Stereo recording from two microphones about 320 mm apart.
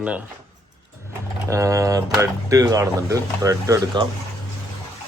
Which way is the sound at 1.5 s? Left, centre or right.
Centre.